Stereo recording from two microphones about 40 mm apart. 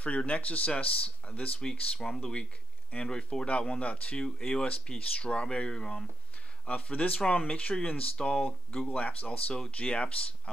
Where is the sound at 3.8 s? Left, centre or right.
Left.